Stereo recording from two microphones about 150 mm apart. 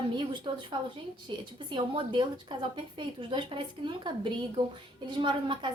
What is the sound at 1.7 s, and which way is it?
A woman's voice, 35° right (ahead or behind).